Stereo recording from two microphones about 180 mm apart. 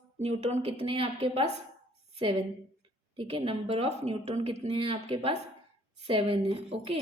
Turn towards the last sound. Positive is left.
turn(degrees=-30)  # may be behind; listen again after turning